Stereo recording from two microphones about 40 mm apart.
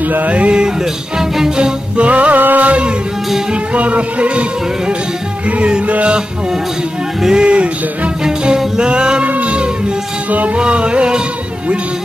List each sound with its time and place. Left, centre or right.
0.3 s music: right
1.1 s music: centre
2.0 s music: right
3.7 s speech: right
5.6 s music: right
7.2 s speech: centre
7.4 s music: right
8.2 s music: centre; by 9.7 s right
10.3 s speech: right
10.6 s music: right